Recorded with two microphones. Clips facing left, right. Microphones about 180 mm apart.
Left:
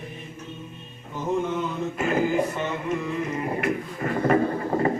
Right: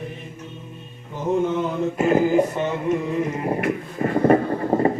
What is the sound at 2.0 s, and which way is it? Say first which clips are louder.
Speech: right 6 dB; 30° right (ahead or behind).